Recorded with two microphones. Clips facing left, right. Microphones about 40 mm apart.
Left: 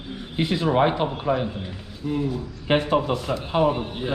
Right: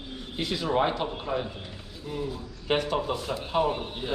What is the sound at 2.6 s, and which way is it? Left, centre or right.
A man's voice, left.